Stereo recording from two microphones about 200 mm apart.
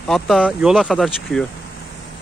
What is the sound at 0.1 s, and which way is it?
Speech, centre (ahead or behind).